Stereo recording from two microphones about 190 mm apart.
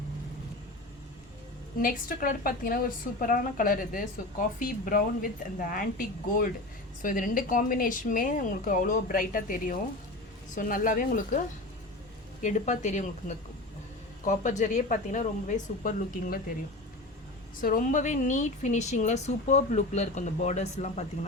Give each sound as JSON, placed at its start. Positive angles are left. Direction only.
{"t": 1.8, "sound": "a woman's voice", "side_deg": 45}
{"t": 12.4, "sound": "a woman's voice", "side_deg": 40}
{"t": 17.6, "sound": "a woman's voice", "side_deg": 45}